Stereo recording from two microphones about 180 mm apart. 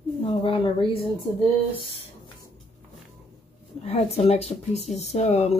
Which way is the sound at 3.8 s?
35° left (ahead or behind).